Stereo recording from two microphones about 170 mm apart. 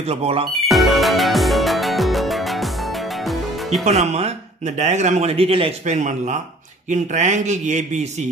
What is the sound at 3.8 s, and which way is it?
A man's voice, 40° right (ahead or behind).